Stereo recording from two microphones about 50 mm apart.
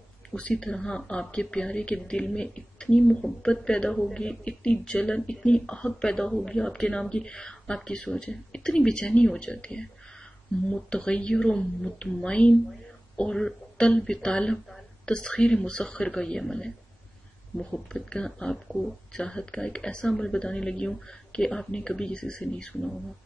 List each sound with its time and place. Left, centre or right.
0.6 s a woman's voice: centre